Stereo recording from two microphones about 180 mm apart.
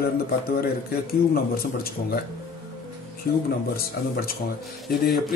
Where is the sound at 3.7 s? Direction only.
55° left (ahead or behind).